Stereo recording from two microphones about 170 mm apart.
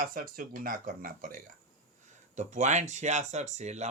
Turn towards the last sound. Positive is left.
turn(degrees=-40)  # may be behind; listen again after turning